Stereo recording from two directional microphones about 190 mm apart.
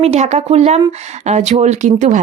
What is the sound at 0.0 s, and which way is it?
A woman's voice, 35° right (ahead or behind).